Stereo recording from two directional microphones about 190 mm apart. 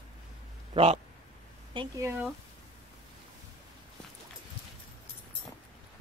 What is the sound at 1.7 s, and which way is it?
Speech, 15° right (ahead or behind).